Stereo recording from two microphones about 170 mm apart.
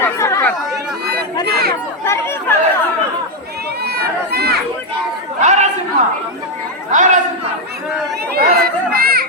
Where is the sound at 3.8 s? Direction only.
70° right (ahead or behind).